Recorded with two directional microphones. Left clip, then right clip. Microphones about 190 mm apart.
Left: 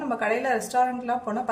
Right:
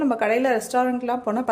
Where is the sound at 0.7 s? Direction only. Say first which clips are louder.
Right 1 dB; 55° right (ahead or behind).